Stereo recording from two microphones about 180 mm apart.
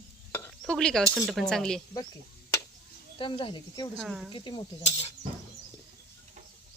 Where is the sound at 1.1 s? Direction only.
Centre (ahead or behind).